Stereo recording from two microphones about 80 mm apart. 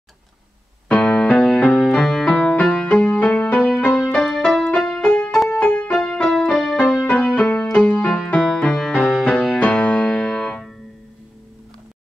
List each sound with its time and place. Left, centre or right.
0.9 s music: centre